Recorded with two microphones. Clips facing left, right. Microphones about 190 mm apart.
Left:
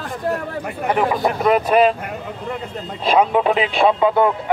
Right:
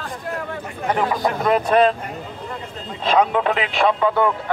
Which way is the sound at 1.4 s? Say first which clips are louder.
Left 1 dB; 10° left (ahead or behind).